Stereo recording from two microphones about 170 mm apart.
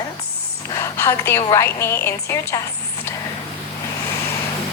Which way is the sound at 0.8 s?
15° left (ahead or behind).